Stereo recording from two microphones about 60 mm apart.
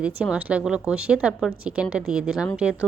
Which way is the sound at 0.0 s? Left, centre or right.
Right.